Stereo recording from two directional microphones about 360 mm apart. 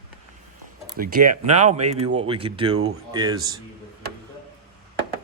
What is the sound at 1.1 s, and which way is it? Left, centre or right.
Speech, right.